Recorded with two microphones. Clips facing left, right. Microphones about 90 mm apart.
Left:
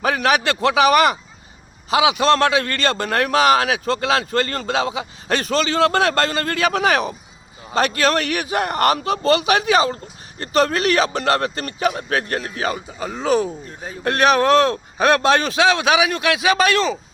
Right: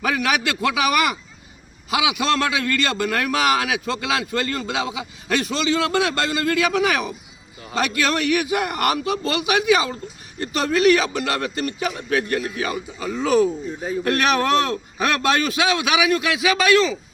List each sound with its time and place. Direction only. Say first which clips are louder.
0.0 s a man's voice: left 3 dB; 35° left (ahead or behind)
11.8 s a man's voice: left 5 dB; 55° left (ahead or behind)
12.1 s a man's voice: right 1 dB; 35° left (ahead or behind)